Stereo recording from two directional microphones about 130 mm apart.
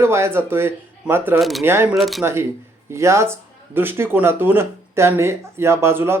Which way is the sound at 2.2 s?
20° right (ahead or behind).